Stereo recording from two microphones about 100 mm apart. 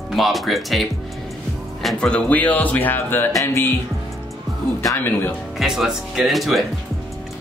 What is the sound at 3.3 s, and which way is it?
Music, 25° left (ahead or behind).